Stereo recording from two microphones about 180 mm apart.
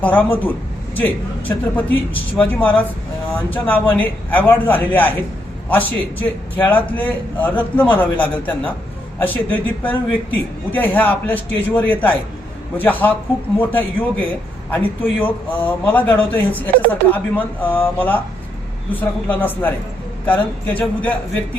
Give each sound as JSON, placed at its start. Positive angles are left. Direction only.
{"t": 0.0, "sound": "speech", "side_deg": 10}